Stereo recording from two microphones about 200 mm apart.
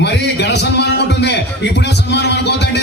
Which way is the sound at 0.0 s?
60° left (ahead or behind).